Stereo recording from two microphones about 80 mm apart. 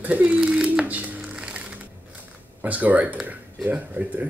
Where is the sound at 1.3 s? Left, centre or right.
Centre.